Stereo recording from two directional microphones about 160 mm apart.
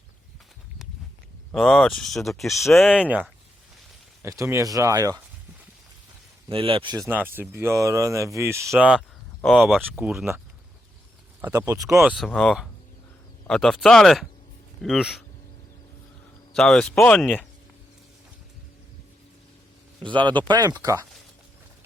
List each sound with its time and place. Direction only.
1.5 s speech: centre (ahead or behind)
3.0 s speech: 10° right (ahead or behind)
6.5 s speech: 35° right (ahead or behind)
7.3 s speech: 15° right (ahead or behind)
11.3 s speech: 15° right (ahead or behind)
11.9 s speech: centre (ahead or behind)
16.6 s speech: 5° left (ahead or behind)
20.5 s speech: 25° right (ahead or behind)